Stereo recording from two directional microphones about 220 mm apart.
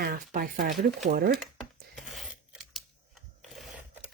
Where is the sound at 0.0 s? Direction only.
45° right (ahead or behind).